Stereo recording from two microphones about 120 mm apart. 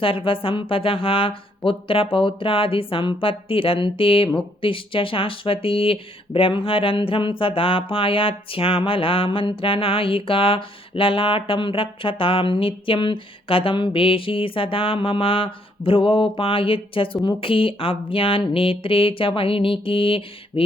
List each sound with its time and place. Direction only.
0.0 s speech: 50° left (ahead or behind)